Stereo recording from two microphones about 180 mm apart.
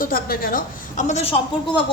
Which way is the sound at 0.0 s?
55° left (ahead or behind).